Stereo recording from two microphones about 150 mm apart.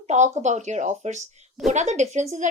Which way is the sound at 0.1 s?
50° right (ahead or behind).